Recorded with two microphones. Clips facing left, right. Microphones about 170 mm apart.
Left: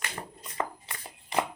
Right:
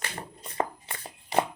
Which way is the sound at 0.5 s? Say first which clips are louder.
Right 3 dB; 30° right (ahead or behind).